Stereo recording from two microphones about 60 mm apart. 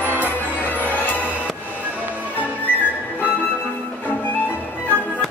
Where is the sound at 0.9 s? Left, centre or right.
Left.